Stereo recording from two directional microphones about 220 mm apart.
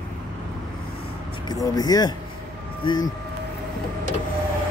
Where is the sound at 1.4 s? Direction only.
20° left (ahead or behind).